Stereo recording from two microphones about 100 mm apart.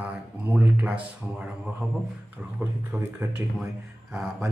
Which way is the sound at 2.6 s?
25° right (ahead or behind).